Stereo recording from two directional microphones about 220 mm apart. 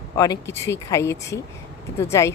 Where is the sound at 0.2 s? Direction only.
15° left (ahead or behind).